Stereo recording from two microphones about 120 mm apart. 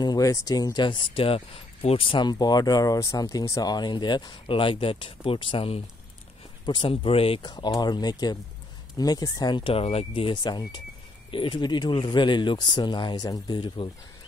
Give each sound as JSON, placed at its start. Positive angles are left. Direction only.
{"t": 0.0, "sound": "speech", "side_deg": 30}
{"t": 7.4, "sound": "speech", "side_deg": 35}
{"t": 13.8, "sound": "speech", "side_deg": 50}